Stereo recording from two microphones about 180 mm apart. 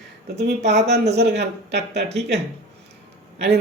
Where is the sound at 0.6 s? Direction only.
40° right (ahead or behind).